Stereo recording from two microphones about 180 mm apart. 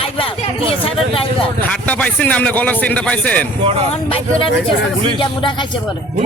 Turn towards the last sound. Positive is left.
turn(degrees=25)  # may be behind; listen again after turning